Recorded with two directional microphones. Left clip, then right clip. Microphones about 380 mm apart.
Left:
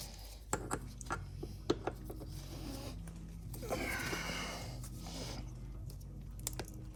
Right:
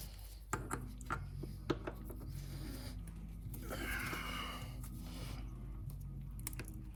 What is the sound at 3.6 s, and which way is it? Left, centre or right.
Music, centre.